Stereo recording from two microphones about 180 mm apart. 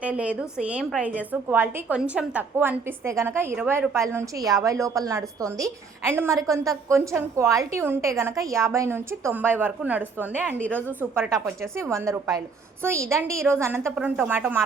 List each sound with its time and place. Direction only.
0.0 s a woman's voice: 5° right (ahead or behind)